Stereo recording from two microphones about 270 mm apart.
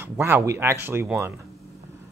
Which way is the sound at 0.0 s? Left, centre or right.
Centre.